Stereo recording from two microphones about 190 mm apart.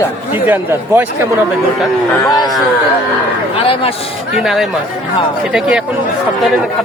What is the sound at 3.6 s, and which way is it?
Speech, 30° left (ahead or behind).